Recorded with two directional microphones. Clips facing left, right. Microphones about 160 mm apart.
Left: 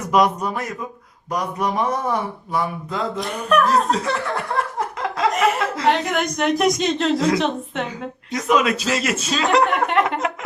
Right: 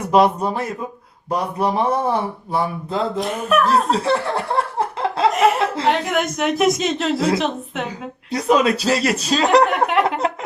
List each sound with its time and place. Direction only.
0.0 s speech: 30° right (ahead or behind)
3.2 s a woman's voice: centre (ahead or behind)
3.7 s speech: 30° right (ahead or behind)
5.3 s speech: centre (ahead or behind)
5.5 s speech: 30° right (ahead or behind)
5.9 s a woman's voice: centre (ahead or behind)
8.3 s speech: 35° right (ahead or behind)
10.2 s a sound: 35° right (ahead or behind)